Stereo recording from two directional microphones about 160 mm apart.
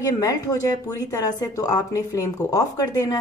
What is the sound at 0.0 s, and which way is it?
A woman's voice, 20° left (ahead or behind).